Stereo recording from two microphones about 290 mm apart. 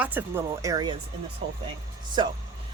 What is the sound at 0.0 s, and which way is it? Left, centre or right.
Speech, centre.